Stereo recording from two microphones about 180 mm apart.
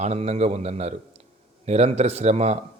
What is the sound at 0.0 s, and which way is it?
Speech, 35° right (ahead or behind).